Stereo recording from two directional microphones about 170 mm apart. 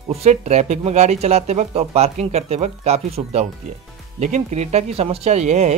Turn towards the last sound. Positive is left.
turn(degrees=-40)  # may be behind; listen again after turning